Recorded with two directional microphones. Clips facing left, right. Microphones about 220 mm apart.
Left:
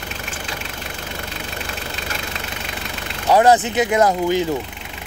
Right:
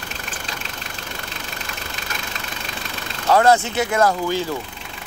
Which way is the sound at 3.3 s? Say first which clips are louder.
Left 2 dB; 15° left (ahead or behind).